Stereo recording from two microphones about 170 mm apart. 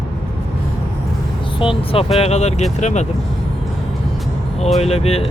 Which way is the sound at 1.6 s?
35° left (ahead or behind).